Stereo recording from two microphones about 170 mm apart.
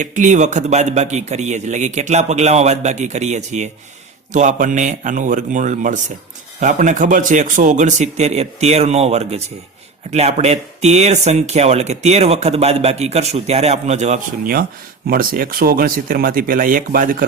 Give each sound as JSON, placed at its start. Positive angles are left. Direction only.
{"t": 0.0, "sound": "speech", "side_deg": -50}
{"t": 15.0, "sound": "speech", "side_deg": -60}